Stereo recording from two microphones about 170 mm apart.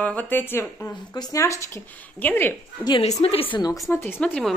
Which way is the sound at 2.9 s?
35° left (ahead or behind).